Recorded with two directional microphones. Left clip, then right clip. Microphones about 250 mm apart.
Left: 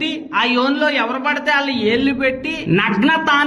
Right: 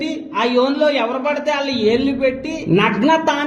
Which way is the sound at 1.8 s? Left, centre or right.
Left.